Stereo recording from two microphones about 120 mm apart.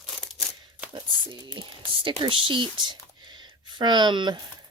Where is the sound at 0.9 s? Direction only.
40° right (ahead or behind).